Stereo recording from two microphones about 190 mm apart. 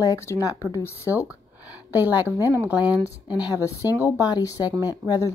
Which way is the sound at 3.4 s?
15° left (ahead or behind).